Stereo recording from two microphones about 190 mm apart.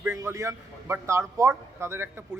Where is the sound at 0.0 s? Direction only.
15° right (ahead or behind).